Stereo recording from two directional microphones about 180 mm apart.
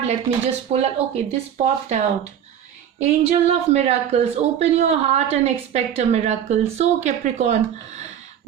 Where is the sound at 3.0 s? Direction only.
35° right (ahead or behind).